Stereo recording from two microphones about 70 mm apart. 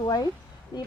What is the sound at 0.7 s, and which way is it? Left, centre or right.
Speech, left.